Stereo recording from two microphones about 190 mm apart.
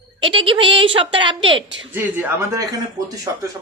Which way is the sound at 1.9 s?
10° right (ahead or behind).